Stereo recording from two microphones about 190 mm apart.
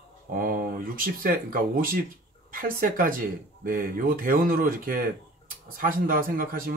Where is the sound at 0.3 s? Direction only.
45° right (ahead or behind).